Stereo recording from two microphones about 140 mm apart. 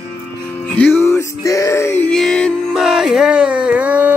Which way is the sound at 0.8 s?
15° left (ahead or behind).